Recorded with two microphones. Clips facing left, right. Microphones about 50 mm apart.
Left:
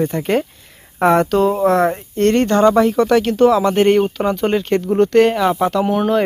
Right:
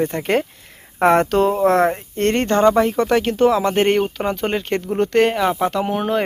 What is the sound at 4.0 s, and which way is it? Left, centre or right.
Speech, centre.